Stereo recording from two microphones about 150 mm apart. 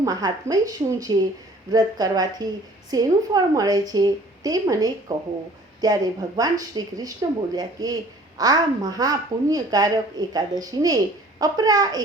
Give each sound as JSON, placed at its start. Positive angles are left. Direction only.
{"t": 0.0, "sound": "a woman's voice", "side_deg": -25}